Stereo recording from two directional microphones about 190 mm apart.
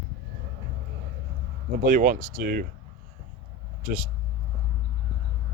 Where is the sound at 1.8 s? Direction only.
45° right (ahead or behind).